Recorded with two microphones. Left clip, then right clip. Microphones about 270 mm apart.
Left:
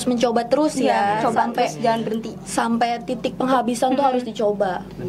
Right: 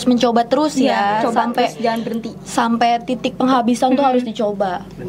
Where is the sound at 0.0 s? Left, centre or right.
Right.